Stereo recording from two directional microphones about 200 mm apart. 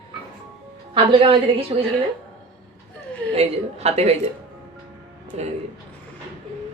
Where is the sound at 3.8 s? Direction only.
30° right (ahead or behind).